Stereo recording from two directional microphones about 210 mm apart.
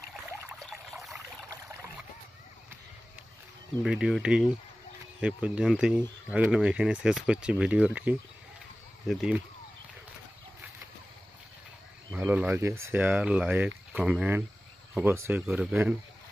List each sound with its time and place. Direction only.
3.8 s speech: centre (ahead or behind)
12.1 s speech: 5° right (ahead or behind)